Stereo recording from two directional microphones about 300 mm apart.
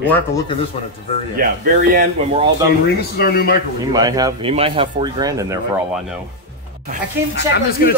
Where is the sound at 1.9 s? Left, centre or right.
Right.